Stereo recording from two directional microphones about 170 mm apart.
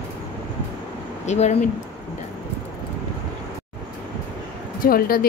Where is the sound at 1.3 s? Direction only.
40° left (ahead or behind).